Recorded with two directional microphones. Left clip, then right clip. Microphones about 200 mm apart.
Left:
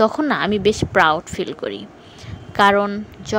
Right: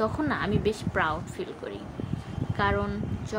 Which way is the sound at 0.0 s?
40° left (ahead or behind).